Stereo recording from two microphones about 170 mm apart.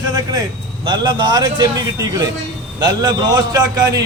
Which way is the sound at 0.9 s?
25° right (ahead or behind).